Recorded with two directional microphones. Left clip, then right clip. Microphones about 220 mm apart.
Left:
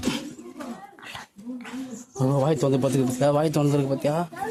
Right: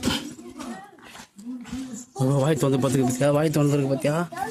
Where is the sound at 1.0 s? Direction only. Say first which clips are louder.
Left 3 dB; 35° left (ahead or behind).